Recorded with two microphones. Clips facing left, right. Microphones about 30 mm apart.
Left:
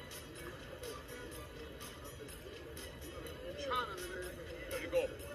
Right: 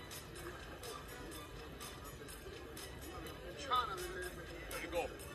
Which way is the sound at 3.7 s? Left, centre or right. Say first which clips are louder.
Right 2 dB; centre.